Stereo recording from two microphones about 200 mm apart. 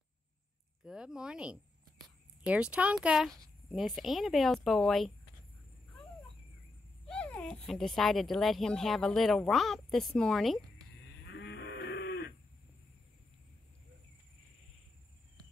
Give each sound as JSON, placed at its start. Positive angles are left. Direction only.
{"t": 0.8, "sound": "speech", "side_deg": -5}
{"t": 7.1, "sound": "speech", "side_deg": 5}
{"t": 11.2, "sound": "livestock", "side_deg": 60}